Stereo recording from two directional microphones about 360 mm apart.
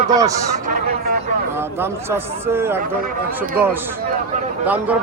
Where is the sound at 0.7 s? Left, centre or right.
Right.